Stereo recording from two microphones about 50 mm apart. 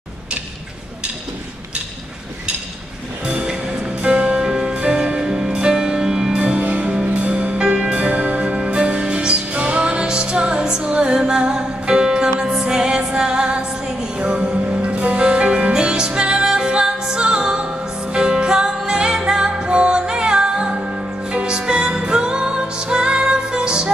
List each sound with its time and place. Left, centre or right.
3.3 s music: right
6.6 s music: right